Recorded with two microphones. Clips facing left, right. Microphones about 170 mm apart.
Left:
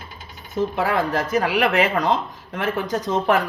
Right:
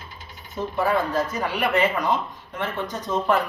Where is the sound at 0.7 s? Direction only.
90° left.